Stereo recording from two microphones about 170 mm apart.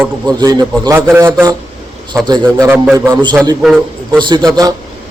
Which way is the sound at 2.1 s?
25° right (ahead or behind).